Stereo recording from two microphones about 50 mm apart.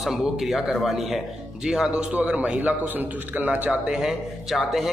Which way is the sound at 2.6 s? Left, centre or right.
Right.